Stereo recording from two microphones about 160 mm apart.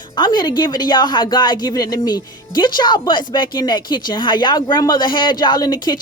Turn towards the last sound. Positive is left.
turn(degrees=25)  # may be behind; listen again after turning